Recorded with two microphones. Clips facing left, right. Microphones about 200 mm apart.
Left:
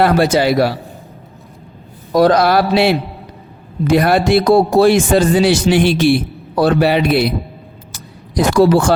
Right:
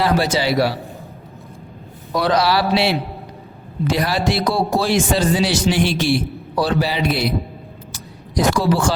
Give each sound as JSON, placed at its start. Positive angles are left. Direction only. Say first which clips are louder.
{"t": 0.0, "sound": "a man's voice", "louder": "left 6 dB", "side_deg": 55}
{"t": 2.2, "sound": "a man's voice", "louder": "left 5 dB", "side_deg": 50}
{"t": 7.9, "sound": "a sound", "louder": "left 4 dB", "side_deg": 60}